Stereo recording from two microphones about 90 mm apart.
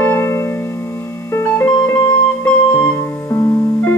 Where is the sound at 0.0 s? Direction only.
30° left (ahead or behind).